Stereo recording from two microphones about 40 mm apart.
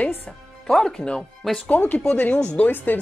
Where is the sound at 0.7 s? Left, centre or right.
Centre.